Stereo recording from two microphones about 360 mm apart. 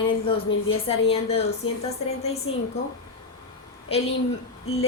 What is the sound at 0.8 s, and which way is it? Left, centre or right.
Speech, centre.